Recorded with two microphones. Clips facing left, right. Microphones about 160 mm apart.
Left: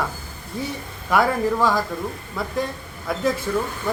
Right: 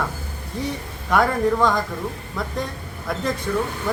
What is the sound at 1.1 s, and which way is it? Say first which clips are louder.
A man's voice: right 1 dB; centre (ahead or behind).